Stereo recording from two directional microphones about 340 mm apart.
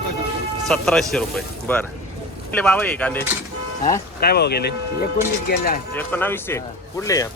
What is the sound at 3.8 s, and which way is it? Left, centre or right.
Speech, left.